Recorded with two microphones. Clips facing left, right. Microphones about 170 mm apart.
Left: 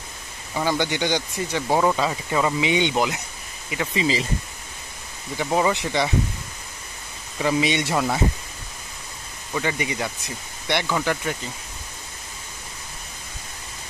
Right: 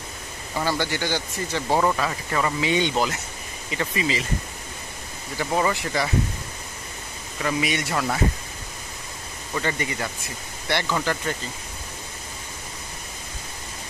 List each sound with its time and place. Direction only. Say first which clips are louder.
0.6 s speech: left 2 dB; 15° left (ahead or behind)
5.4 s speech: left 2 dB; 15° left (ahead or behind)
7.4 s speech: left 4 dB; 25° left (ahead or behind)
9.5 s speech: left 1 dB; 10° left (ahead or behind)